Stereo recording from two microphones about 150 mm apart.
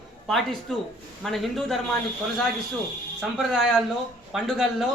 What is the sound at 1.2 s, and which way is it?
Speech, centre (ahead or behind).